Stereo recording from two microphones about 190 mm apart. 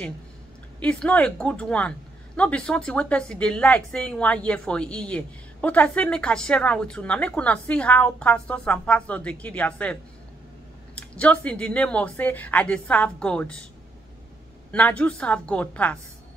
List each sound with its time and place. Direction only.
0.7 s a woman's voice: 5° left (ahead or behind)
11.0 s speech: 5° left (ahead or behind)
14.7 s speech: 5° left (ahead or behind)